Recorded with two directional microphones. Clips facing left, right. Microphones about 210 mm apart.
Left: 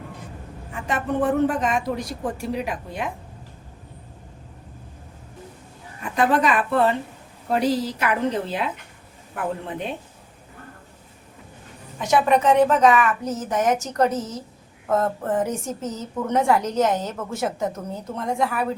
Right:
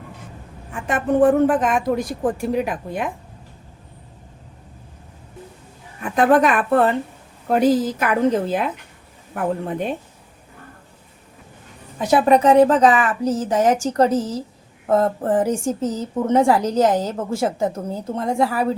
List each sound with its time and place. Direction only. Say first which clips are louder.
0.7 s a woman's voice: right 5 dB; 50° right (ahead or behind)
6.0 s a woman's voice: right 5 dB; 50° right (ahead or behind)
11.9 s a woman's voice: right 4 dB; 35° right (ahead or behind)